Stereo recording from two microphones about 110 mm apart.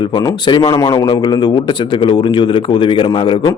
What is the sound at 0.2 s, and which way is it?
A man's voice, 40° left (ahead or behind).